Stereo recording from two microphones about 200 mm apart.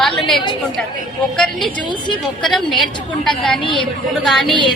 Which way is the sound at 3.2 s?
5° left (ahead or behind).